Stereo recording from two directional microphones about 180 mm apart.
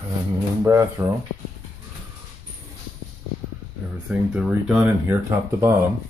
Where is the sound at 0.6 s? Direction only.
15° right (ahead or behind).